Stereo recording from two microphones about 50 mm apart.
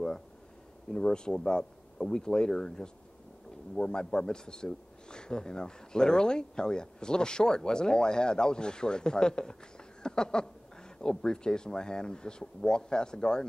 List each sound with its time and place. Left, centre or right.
0.9 s speech: centre